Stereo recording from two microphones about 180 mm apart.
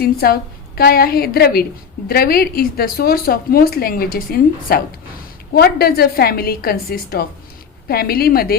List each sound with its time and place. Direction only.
0.0 s speech: 60° left (ahead or behind)